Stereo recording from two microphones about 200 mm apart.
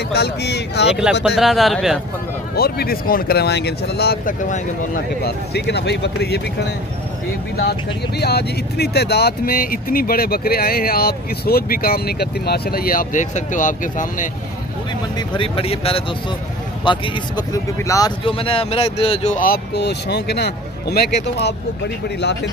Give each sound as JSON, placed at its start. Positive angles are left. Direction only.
{"t": 0.1, "sound": "speech", "side_deg": 55}
{"t": 1.2, "sound": "speech", "side_deg": 0}
{"t": 2.5, "sound": "speech", "side_deg": 50}
{"t": 8.2, "sound": "speech", "side_deg": 55}
{"t": 15.1, "sound": "speech", "side_deg": 25}